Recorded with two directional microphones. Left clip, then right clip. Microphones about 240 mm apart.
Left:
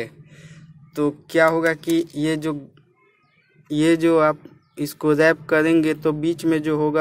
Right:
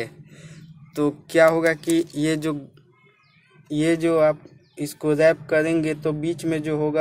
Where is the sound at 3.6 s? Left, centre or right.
Centre.